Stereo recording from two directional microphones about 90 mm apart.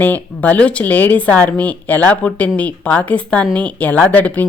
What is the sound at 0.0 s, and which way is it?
Speech, 20° left (ahead or behind).